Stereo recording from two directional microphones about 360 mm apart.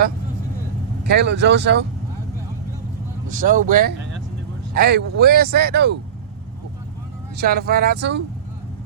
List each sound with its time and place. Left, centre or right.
1.0 s speech: right
3.3 s speech: right
7.3 s speech: right